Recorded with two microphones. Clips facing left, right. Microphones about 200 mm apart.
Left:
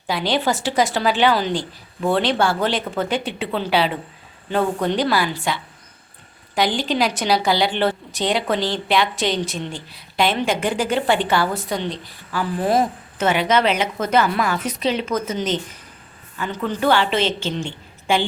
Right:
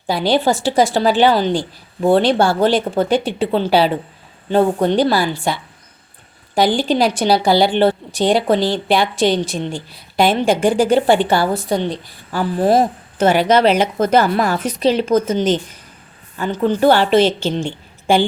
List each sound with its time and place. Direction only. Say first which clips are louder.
0.1 s a woman's voice: right 5 dB; 35° right (ahead or behind)
6.7 s a woman's voice: right 5 dB; 35° right (ahead or behind)
16.9 s a woman's voice: right 6 dB; 40° right (ahead or behind)